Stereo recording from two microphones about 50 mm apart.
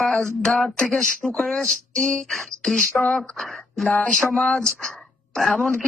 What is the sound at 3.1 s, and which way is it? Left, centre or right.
Speech, centre.